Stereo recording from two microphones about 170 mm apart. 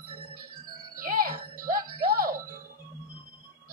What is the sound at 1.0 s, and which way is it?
Music, 55° right (ahead or behind).